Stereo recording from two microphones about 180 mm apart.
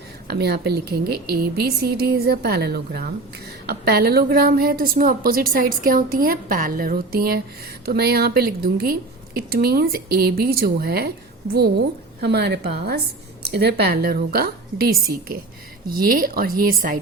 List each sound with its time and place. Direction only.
0.3 s a woman's voice: 65° right (ahead or behind)
12.2 s a woman's voice: 65° right (ahead or behind)